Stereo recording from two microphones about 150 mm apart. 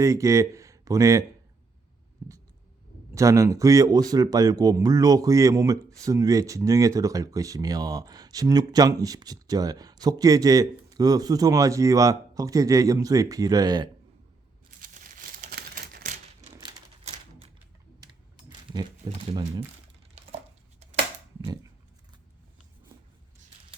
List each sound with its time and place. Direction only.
0.0 s speech: 20° right (ahead or behind)
2.2 s a sound: 15° right (ahead or behind)
3.2 s speech: 20° right (ahead or behind)
14.8 s crumpling: 65° right (ahead or behind); by 16.1 s 80° right
17.0 s typewriter: 45° right (ahead or behind)
18.0 s typing: 25° right (ahead or behind)
19.3 s speech: 40° right (ahead or behind)